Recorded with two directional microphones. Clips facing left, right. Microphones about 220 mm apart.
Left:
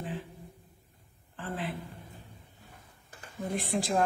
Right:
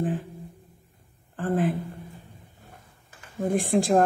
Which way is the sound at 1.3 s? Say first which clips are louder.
Right 12 dB; 45° right (ahead or behind).